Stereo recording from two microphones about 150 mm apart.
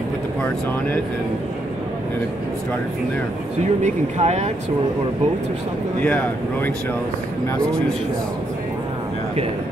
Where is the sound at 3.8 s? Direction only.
50° right (ahead or behind).